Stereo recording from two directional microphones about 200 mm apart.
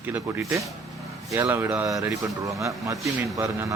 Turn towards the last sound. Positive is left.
turn(degrees=-15)  # may be behind; listen again after turning